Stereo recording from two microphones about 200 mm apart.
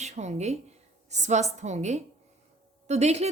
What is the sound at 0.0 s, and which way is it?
A woman's voice, 35° right (ahead or behind).